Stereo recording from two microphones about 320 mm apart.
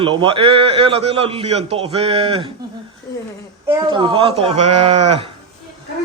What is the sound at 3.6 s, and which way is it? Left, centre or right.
A man's voice, centre.